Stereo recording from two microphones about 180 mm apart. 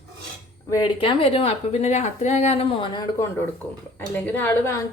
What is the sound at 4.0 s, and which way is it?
Speech, 10° left (ahead or behind).